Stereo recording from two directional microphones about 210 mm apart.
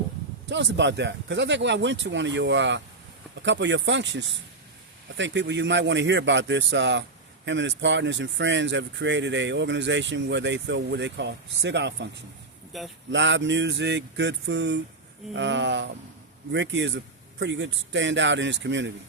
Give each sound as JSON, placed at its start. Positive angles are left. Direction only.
{"t": 0.4, "sound": "speech", "side_deg": -60}
{"t": 12.7, "sound": "speech", "side_deg": 0}
{"t": 13.1, "sound": "speech", "side_deg": -60}